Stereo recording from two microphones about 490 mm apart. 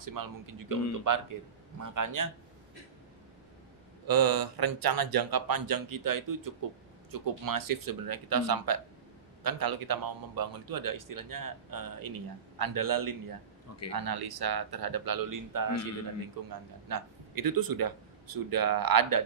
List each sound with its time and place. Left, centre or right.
0.0 s a man's voice: right
4.1 s a man's voice: right